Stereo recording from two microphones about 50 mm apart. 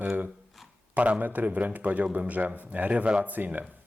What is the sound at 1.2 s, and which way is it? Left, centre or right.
Speech, right.